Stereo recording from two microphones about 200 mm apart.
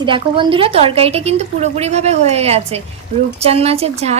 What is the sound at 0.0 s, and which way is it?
Speech, 25° right (ahead or behind).